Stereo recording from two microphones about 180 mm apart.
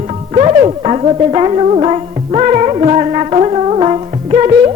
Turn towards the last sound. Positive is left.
turn(degrees=-30)  # may be behind; listen again after turning